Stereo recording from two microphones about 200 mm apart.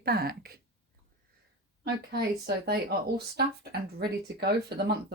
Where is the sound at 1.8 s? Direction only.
55° right (ahead or behind).